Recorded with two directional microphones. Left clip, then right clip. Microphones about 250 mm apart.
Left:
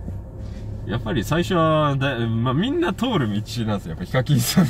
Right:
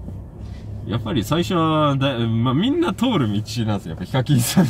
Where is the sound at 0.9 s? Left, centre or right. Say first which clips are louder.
Right 1 dB; centre.